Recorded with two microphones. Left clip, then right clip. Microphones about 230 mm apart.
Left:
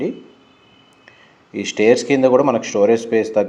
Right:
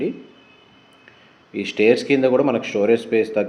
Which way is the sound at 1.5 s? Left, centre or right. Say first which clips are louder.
Left 2 dB; left.